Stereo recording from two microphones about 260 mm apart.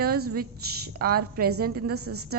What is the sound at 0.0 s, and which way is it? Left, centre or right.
A woman's voice, right.